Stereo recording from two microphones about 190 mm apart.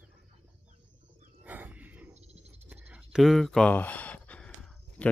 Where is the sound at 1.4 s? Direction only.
10° right (ahead or behind).